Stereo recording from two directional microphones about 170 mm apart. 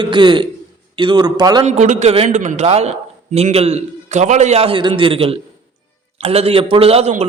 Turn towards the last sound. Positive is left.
turn(degrees=-40)  # may be behind; listen again after turning